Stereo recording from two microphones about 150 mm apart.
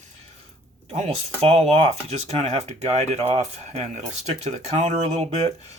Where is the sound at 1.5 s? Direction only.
45° right (ahead or behind).